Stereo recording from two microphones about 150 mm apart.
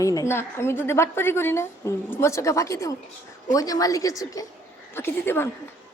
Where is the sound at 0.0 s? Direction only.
20° left (ahead or behind).